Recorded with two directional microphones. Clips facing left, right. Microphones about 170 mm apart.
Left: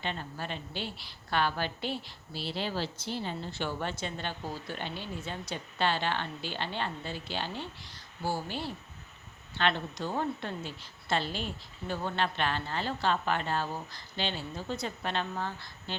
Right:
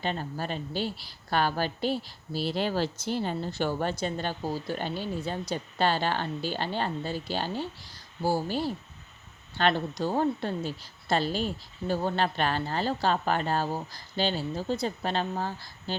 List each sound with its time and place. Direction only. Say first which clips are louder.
0.0 s a woman's voice: right 5 dB; 40° right (ahead or behind)